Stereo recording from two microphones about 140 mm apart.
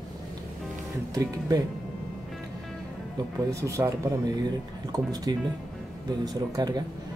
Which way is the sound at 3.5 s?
20° right (ahead or behind).